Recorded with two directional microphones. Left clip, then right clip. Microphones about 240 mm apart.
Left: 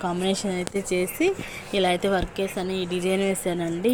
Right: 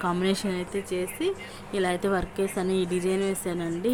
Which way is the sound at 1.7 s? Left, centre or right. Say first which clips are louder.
Left 4 dB; centre.